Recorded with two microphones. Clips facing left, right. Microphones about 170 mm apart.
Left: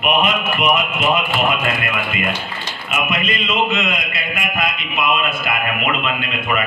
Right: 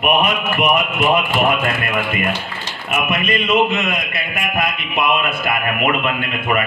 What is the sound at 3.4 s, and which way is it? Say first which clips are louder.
Speech: right 4 dB; 55° right (ahead or behind).